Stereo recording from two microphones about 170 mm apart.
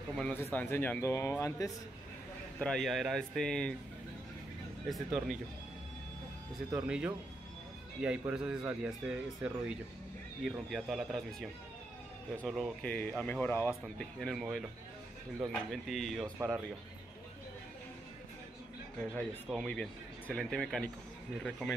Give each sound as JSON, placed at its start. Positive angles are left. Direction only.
{"t": 0.1, "sound": "speech", "side_deg": 5}
{"t": 2.6, "sound": "speech", "side_deg": 0}
{"t": 4.8, "sound": "speech", "side_deg": 0}
{"t": 6.9, "sound": "speech", "side_deg": -5}
{"t": 13.9, "sound": "speech", "side_deg": 0}
{"t": 16.3, "sound": "speech", "side_deg": -10}
{"t": 19.4, "sound": "speech", "side_deg": 5}